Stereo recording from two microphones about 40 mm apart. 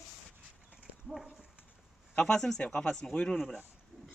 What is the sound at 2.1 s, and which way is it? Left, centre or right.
Speech, centre.